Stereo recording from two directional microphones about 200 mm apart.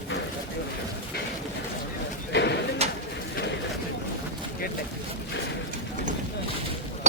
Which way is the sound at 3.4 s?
45° left (ahead or behind).